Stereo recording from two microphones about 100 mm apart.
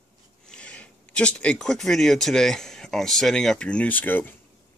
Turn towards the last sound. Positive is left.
turn(degrees=20)  # may be behind; listen again after turning